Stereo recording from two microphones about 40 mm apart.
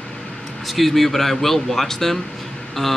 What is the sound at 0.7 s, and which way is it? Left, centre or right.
Speech, centre.